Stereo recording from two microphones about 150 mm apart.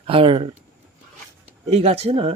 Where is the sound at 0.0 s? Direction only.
35° right (ahead or behind).